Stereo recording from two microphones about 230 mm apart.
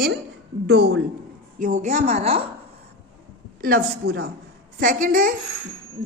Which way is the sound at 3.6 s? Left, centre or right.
Right.